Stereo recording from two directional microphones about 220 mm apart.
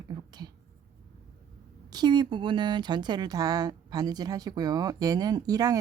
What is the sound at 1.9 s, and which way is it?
Speech, 20° right (ahead or behind).